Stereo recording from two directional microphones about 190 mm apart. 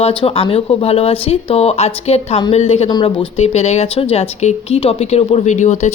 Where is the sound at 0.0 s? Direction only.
30° left (ahead or behind).